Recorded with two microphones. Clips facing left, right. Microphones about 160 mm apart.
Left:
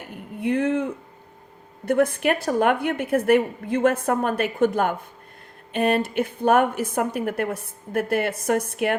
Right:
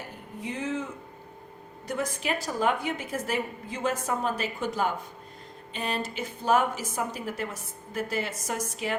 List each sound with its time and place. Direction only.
0.3 s a woman's voice: 60° left (ahead or behind)